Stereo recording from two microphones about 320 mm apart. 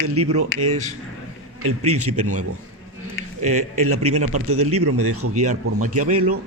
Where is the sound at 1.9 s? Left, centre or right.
Right.